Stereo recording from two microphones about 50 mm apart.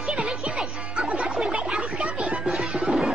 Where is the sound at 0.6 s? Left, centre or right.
Centre.